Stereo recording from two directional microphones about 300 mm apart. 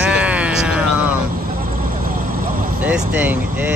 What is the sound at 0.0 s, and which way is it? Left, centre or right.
Music, centre.